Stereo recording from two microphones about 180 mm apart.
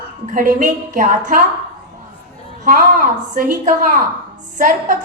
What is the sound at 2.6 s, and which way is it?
A woman's voice, 45° right (ahead or behind).